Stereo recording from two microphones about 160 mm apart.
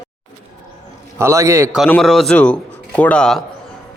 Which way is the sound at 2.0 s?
Centre (ahead or behind).